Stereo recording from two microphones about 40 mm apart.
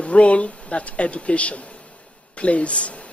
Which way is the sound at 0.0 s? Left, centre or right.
Left.